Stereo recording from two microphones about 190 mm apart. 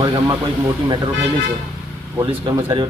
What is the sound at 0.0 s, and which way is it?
A man's voice, 20° right (ahead or behind).